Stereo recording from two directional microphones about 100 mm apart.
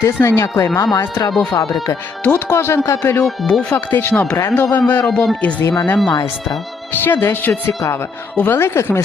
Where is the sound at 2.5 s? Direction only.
25° left (ahead or behind).